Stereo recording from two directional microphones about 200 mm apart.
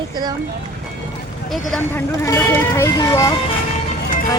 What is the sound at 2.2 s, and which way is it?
Speech, 15° left (ahead or behind).